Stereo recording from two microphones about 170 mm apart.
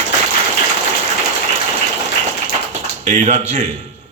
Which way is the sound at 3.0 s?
40° right (ahead or behind).